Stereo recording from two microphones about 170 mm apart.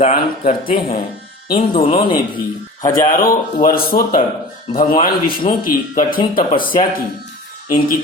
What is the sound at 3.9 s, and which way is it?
Speech, 45° left (ahead or behind).